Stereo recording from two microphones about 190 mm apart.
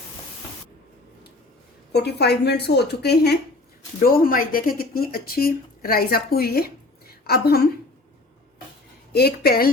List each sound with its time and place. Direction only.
1.9 s a woman's voice: 60° left (ahead or behind)
4.0 s a woman's voice: 50° left (ahead or behind)
9.1 s a woman's voice: 55° left (ahead or behind)